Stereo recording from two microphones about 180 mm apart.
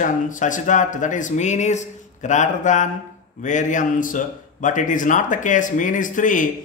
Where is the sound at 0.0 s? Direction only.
45° left (ahead or behind).